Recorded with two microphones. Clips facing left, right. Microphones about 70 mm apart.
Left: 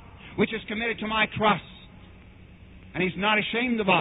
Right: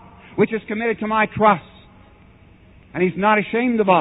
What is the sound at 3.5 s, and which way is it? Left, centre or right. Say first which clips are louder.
Speech: right 8 dB; right.